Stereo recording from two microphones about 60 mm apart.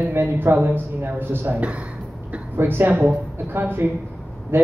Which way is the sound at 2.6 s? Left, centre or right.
Right.